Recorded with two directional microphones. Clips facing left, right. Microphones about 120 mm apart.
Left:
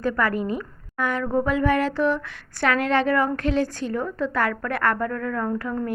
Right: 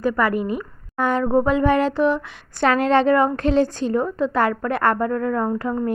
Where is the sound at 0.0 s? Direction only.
10° right (ahead or behind).